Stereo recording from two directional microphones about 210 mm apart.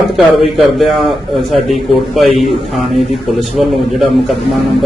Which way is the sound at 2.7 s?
Centre (ahead or behind).